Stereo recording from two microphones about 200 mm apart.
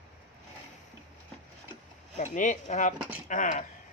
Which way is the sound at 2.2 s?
40° left (ahead or behind).